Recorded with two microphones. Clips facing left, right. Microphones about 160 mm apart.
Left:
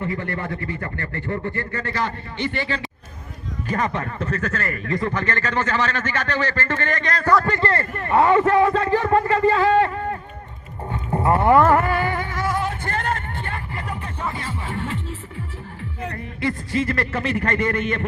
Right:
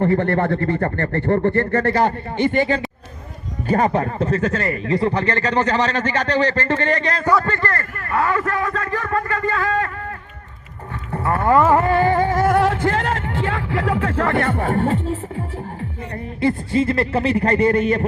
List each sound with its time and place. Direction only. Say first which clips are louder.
0.0 s speech: right 9 dB; 60° right (ahead or behind)
2.0 s speech: right 7 dB; 50° right (ahead or behind)
3.7 s speech: right 7 dB; 35° right (ahead or behind)
6.3 s speech: right 6 dB; 20° right (ahead or behind)
6.7 s speech: right 4 dB; 30° right (ahead or behind)
7.4 s speech: left 1 dB; 20° left (ahead or behind)
11.7 s music: right 4 dB; 25° right (ahead or behind)
12.5 s speech: right 8 dB; 75° right (ahead or behind); by 15.1 s 45° right (ahead or behind)
16.4 s speech: right 5 dB; 25° right (ahead or behind)